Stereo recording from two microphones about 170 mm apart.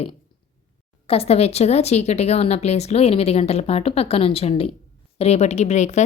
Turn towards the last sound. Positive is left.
turn(degrees=45)  # may be behind; listen again after turning